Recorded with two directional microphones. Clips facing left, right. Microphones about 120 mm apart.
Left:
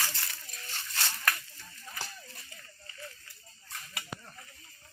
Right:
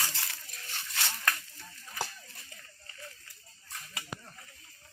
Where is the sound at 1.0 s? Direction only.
20° right (ahead or behind).